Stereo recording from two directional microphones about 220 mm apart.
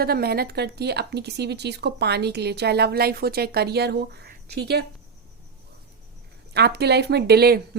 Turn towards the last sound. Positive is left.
turn(degrees=-45)  # may be behind; listen again after turning